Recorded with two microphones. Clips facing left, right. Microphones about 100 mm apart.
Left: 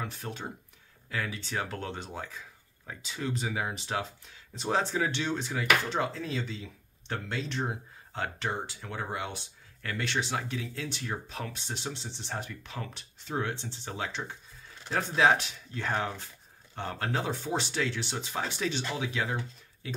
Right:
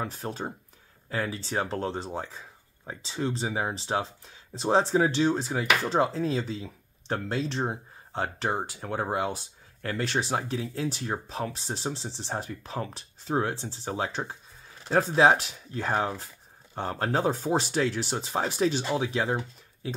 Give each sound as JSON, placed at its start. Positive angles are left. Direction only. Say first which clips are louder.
{"t": 0.0, "sound": "speech", "louder": "right 5 dB", "side_deg": -35}